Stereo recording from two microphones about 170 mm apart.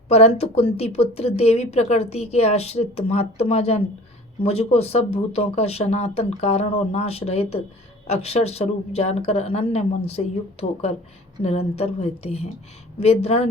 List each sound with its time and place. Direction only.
0.1 s speech: 35° left (ahead or behind)